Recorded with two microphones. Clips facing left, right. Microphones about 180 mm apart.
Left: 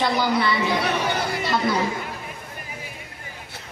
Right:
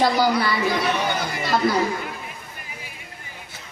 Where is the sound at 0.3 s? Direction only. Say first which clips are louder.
Left 1 dB; 25° left (ahead or behind).